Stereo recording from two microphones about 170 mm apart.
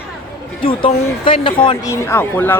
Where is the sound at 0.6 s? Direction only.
30° left (ahead or behind).